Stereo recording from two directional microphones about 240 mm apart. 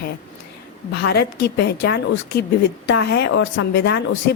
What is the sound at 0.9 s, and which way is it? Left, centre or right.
A woman's voice, left.